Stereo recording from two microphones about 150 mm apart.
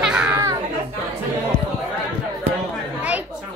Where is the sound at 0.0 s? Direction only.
5° right (ahead or behind).